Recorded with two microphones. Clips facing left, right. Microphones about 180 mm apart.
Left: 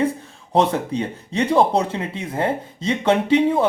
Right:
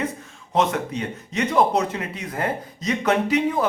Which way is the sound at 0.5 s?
30° left (ahead or behind).